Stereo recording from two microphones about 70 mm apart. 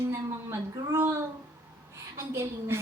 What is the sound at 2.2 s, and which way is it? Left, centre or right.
Speech, right.